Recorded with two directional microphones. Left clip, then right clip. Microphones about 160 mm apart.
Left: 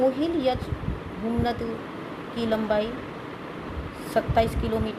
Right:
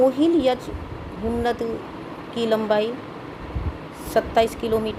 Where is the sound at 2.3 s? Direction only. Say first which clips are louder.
Right 4 dB; 40° right (ahead or behind).